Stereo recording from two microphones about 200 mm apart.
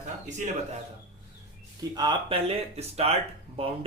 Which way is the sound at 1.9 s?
20° right (ahead or behind).